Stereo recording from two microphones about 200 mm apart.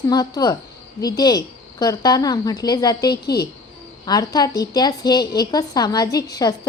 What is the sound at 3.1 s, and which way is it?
Speech, 55° left (ahead or behind).